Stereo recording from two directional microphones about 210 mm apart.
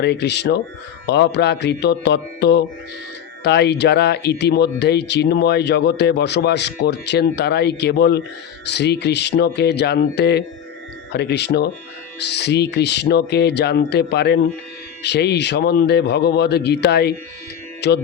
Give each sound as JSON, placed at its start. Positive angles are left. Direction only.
{"t": 0.0, "sound": "speech", "side_deg": 55}